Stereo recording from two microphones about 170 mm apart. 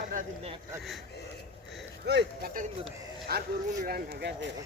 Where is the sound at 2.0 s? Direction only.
80° right.